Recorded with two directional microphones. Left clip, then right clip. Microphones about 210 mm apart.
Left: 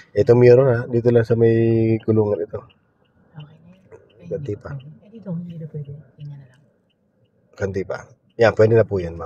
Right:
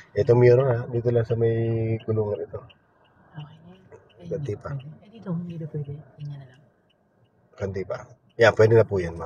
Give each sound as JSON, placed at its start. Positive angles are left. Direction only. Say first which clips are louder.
{"t": 0.0, "sound": "speech", "louder": "left 5 dB", "side_deg": 35}
{"t": 3.9, "sound": "a sound", "louder": "left 3 dB", "side_deg": 20}
{"t": 7.5, "sound": "a man's voice", "louder": "left 5 dB", "side_deg": 35}